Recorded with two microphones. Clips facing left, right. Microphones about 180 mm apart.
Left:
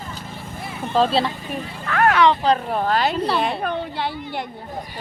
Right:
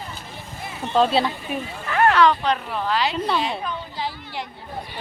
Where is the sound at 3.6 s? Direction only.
60° left (ahead or behind).